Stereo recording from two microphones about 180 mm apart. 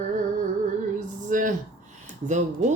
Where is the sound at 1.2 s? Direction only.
45° right (ahead or behind).